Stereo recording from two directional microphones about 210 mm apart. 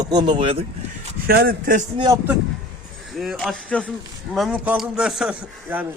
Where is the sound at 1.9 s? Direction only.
20° right (ahead or behind).